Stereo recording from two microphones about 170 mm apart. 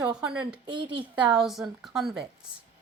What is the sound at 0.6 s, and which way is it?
Speech, 30° right (ahead or behind).